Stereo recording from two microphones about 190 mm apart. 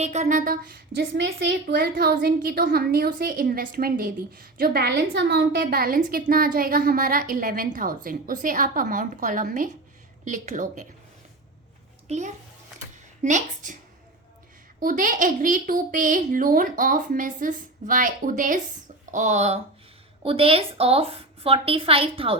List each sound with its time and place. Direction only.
0.0 s a woman's voice: 35° right (ahead or behind)
12.0 s a child's voice: 35° right (ahead or behind)
14.8 s a woman's voice: 45° right (ahead or behind); by 22.4 s 30° right (ahead or behind)